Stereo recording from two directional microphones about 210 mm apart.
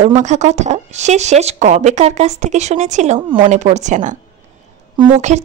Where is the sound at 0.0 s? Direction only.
35° right (ahead or behind).